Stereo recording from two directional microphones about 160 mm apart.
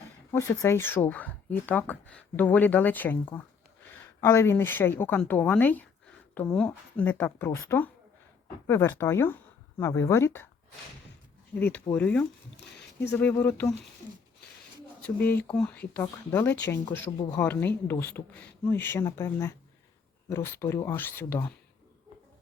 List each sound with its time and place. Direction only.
0.3 s a woman's voice: 20° left (ahead or behind)
11.5 s speech: 10° left (ahead or behind)
15.5 s speech: 10° left (ahead or behind)